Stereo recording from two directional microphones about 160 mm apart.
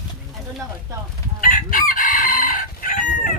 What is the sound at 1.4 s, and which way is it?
Chicken, 55° left (ahead or behind).